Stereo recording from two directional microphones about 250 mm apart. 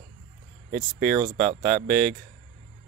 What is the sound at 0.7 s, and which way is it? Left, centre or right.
Speech, right.